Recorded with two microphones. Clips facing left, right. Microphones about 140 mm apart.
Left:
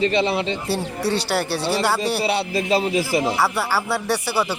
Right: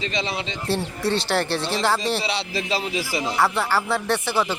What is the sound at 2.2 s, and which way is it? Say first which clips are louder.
A man's voice: left 5 dB; 50° left (ahead or behind).